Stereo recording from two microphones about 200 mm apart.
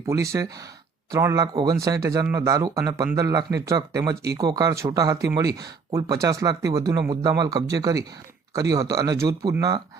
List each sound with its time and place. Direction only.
0.1 s speech: 15° right (ahead or behind)